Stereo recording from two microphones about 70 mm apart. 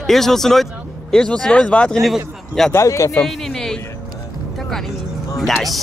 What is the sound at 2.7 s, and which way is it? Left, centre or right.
Speech, left.